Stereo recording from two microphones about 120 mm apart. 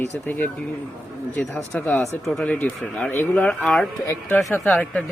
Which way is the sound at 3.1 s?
20° left (ahead or behind).